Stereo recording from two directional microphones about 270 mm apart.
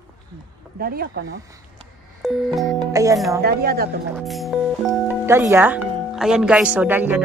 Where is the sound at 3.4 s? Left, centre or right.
Right.